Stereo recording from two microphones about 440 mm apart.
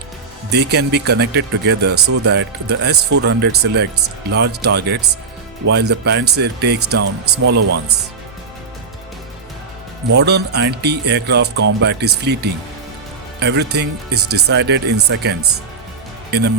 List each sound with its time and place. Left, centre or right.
0.5 s speech: right
7.6 s speech: right
10.2 s speech: right